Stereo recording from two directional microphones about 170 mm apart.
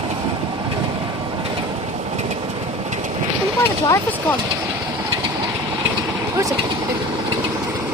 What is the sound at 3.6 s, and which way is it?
Speech, 15° left (ahead or behind).